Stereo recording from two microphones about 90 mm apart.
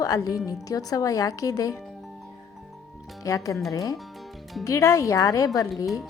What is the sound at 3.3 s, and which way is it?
Speech, 40° left (ahead or behind).